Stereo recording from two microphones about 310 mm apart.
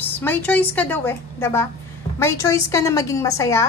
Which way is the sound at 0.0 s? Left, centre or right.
Centre.